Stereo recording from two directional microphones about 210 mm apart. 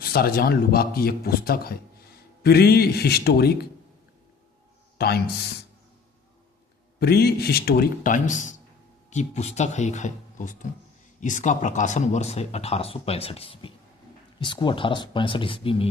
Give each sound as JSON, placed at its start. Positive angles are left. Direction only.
{"t": 0.0, "sound": "a man's voice", "side_deg": 45}
{"t": 4.9, "sound": "speech", "side_deg": 50}
{"t": 7.0, "sound": "speech", "side_deg": 50}